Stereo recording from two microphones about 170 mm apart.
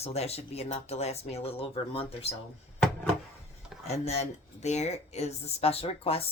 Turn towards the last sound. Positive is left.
turn(degrees=35)  # may be behind; listen again after turning